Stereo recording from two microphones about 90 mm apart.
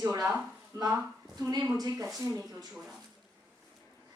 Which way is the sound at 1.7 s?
45° right (ahead or behind).